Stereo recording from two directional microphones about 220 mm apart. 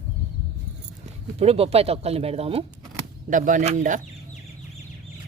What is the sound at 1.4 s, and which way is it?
Speech, 25° right (ahead or behind).